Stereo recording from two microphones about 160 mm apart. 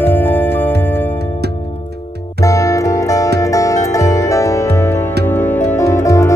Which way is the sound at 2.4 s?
20° left (ahead or behind).